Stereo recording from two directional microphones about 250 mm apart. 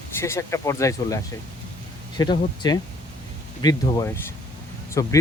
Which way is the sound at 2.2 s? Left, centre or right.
Centre.